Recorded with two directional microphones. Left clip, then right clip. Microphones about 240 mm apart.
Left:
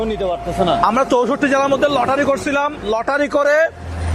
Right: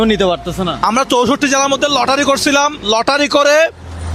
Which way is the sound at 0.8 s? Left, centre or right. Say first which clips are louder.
Right 6 dB; right.